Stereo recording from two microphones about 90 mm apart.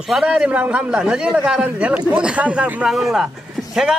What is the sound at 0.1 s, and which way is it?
A man's voice, 10° right (ahead or behind).